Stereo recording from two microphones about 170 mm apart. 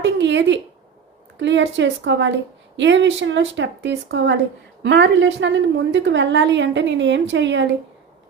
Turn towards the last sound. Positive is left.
turn(degrees=-90)